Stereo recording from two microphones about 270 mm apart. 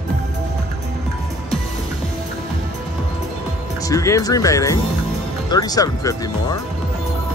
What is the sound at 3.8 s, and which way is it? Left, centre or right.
Speech, centre.